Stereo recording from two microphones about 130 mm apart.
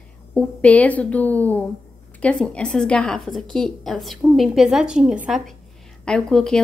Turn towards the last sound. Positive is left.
turn(degrees=5)  # may be behind; listen again after turning